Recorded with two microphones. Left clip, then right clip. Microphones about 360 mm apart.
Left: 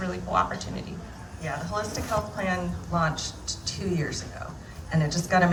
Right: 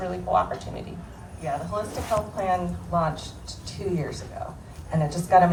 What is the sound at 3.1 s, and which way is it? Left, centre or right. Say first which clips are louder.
A woman's voice: left 5 dB; centre.